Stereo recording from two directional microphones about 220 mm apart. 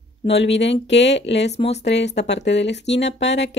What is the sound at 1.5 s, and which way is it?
Speech, 30° left (ahead or behind).